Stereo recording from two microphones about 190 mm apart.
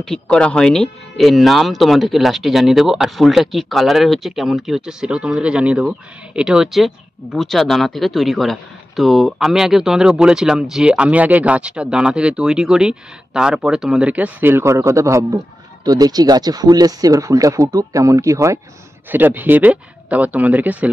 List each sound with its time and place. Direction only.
0.0 s speech: 5° left (ahead or behind)